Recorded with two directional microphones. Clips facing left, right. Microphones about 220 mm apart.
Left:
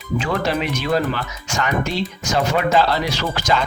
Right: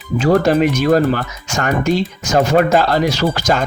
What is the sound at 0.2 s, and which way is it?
Speech, 45° right (ahead or behind).